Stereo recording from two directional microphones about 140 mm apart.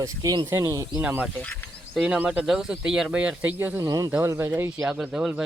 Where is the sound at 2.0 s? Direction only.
5° right (ahead or behind).